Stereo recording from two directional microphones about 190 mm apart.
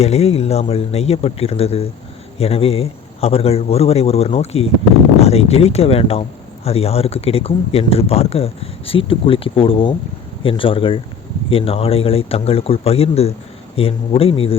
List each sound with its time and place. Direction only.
0.0 s speech: 35° left (ahead or behind)